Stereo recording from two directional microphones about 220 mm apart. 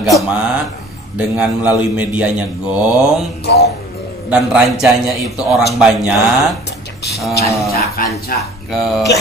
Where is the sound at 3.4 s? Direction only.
50° left (ahead or behind).